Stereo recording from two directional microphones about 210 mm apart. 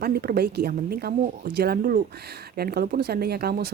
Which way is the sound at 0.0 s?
45° right (ahead or behind).